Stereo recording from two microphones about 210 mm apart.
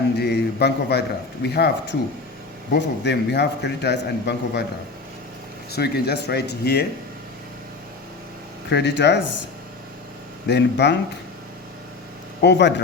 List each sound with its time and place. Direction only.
0.2 s a man's voice: 50° left (ahead or behind)
5.7 s a man's voice: 50° left (ahead or behind)
8.7 s speech: 55° left (ahead or behind)
10.4 s speech: 55° left (ahead or behind)
12.4 s a man's voice: 55° left (ahead or behind)